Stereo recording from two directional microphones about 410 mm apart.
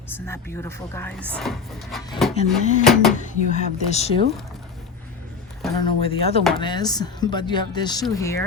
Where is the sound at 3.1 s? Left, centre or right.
Centre.